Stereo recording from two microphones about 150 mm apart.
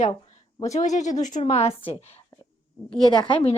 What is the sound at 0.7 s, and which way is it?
A woman's voice, 55° left (ahead or behind).